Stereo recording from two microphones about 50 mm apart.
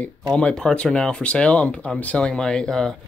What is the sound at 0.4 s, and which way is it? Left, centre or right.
Speech, centre.